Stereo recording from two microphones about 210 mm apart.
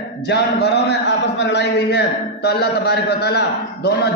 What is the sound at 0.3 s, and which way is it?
A man's voice, 50° left (ahead or behind).